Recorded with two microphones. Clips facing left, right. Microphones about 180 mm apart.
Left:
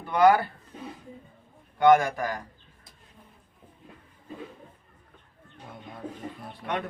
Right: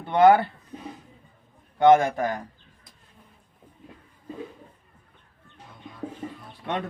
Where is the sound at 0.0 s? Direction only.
25° right (ahead or behind).